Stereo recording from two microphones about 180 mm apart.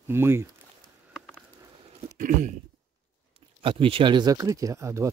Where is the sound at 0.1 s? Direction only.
15° right (ahead or behind).